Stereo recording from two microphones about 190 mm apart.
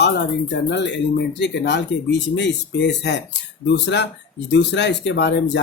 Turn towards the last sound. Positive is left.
turn(degrees=65)  # may be behind; listen again after turning